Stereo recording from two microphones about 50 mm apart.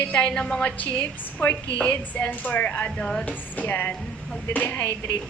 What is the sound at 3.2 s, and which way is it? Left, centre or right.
A woman's voice, left.